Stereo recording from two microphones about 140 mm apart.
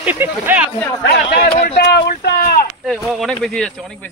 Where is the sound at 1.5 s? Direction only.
90° left.